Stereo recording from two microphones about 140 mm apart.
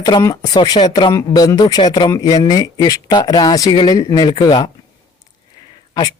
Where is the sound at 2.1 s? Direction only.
25° left (ahead or behind).